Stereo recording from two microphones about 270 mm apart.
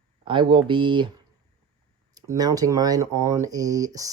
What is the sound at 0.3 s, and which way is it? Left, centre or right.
Speech, centre.